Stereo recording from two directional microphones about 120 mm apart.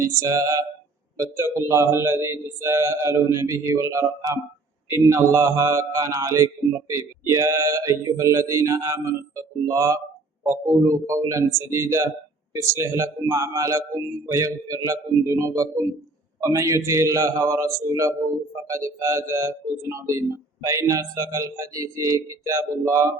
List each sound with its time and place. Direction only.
0.0 s speech: 30° right (ahead or behind)